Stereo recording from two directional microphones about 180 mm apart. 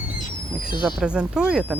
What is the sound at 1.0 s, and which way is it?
Speech, 5° right (ahead or behind).